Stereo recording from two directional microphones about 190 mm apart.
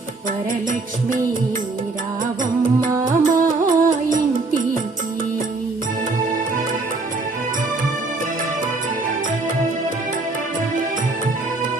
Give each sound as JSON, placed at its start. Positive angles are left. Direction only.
{"t": 3.0, "sound": "music", "side_deg": -45}